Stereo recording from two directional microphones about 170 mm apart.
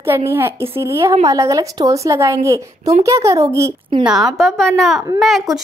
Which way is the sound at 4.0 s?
5° right (ahead or behind).